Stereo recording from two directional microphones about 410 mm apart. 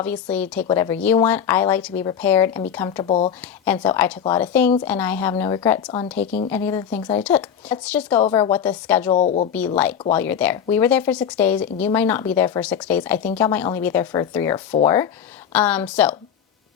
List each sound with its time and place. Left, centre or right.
0.0 s speech: centre
3.4 s speech: centre
9.1 s speech: centre
9.7 s speech: centre